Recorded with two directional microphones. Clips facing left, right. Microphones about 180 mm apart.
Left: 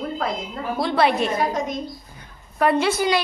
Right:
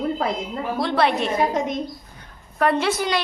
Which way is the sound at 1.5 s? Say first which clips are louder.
Right 2 dB; 25° right (ahead or behind).